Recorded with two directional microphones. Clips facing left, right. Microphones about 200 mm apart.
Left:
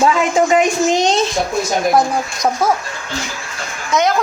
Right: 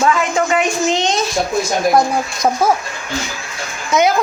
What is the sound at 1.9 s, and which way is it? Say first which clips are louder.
Speech: right 1 dB; centre (ahead or behind).